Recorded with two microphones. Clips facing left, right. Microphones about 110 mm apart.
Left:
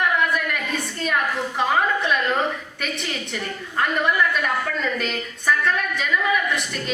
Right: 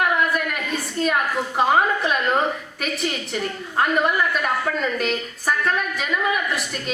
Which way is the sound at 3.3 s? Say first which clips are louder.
Right 2 dB; 45° right (ahead or behind).